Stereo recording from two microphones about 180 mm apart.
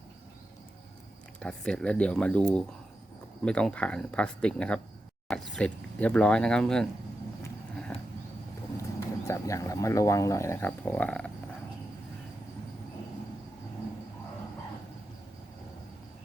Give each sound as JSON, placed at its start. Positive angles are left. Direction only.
{"t": 1.4, "sound": "speech", "side_deg": 5}
{"t": 8.8, "sound": "speech", "side_deg": 15}